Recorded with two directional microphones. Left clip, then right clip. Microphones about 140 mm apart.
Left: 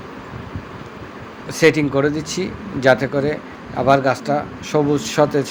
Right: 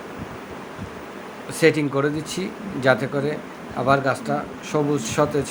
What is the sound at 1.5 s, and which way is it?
Speech, 15° left (ahead or behind).